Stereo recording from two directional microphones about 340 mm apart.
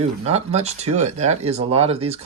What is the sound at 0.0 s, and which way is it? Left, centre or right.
Speech, centre.